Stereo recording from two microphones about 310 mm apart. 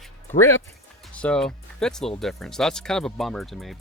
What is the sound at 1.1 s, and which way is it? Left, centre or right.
Speech, centre.